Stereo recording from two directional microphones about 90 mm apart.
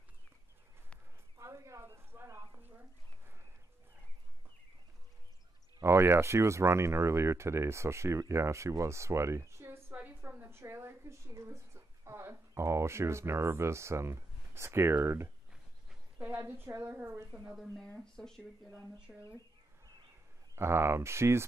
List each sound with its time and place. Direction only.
1.4 s a sound: 35° right (ahead or behind)
5.8 s a woman's voice: 30° right (ahead or behind)
17.7 s speech: 20° left (ahead or behind)
18.0 s speech: 5° left (ahead or behind)
18.9 s speech: 10° right (ahead or behind)
20.5 s a woman's voice: 30° right (ahead or behind)